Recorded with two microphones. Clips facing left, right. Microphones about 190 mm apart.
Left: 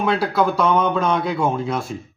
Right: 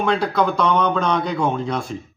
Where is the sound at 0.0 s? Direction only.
5° left (ahead or behind).